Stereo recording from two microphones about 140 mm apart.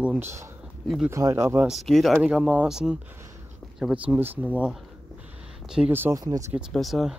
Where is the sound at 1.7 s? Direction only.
Centre (ahead or behind).